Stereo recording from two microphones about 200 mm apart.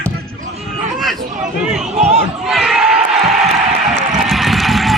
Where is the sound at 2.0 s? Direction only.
30° right (ahead or behind).